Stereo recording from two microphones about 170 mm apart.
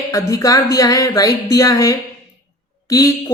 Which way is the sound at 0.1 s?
20° left (ahead or behind).